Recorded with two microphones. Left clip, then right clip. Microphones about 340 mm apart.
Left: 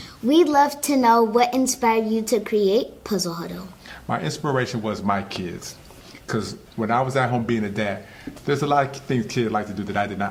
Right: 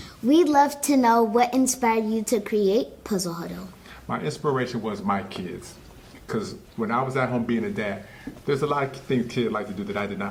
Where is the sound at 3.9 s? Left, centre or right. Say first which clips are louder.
Left 3 dB; left.